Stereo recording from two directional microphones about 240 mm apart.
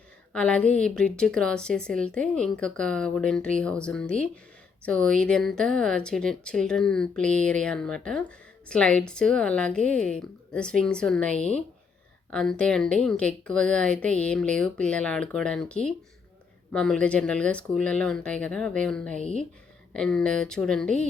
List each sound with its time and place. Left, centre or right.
0.3 s speech: centre